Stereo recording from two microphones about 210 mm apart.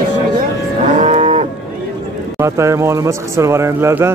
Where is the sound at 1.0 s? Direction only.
35° right (ahead or behind).